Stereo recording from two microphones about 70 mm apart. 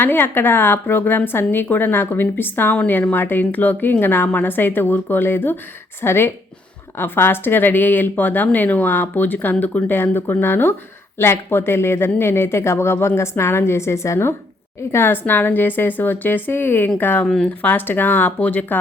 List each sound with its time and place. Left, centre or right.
0.0 s speech: left
17.2 s speech: centre
17.6 s speech: left